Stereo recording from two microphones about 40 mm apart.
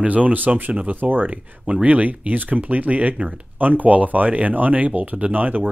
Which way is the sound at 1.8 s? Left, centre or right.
Right.